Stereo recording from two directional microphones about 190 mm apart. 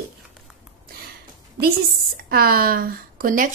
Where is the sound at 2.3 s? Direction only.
50° right (ahead or behind).